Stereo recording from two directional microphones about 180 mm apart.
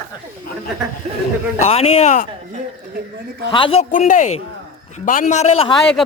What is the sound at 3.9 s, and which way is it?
Speech, 45° left (ahead or behind).